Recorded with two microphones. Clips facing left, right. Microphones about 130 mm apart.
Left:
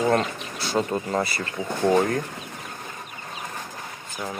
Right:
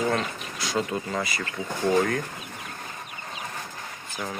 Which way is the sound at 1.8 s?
20° left (ahead or behind).